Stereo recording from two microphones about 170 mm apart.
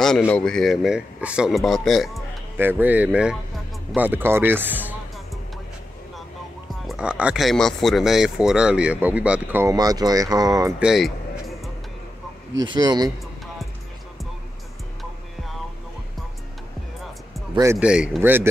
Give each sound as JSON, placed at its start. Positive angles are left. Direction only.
{"t": 0.0, "sound": "speech", "side_deg": 0}
{"t": 2.5, "sound": "speech", "side_deg": -10}
{"t": 6.9, "sound": "speech", "side_deg": -5}
{"t": 10.8, "sound": "music", "side_deg": 0}
{"t": 12.6, "sound": "speech", "side_deg": -25}
{"t": 17.7, "sound": "speech", "side_deg": -5}